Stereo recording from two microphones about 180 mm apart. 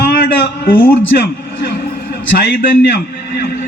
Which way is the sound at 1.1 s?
65° left (ahead or behind).